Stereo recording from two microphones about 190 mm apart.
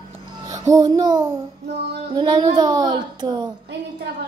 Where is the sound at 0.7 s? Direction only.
20° right (ahead or behind).